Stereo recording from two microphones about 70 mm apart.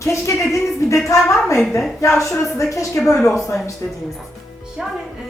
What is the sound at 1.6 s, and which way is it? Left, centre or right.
Speech, centre.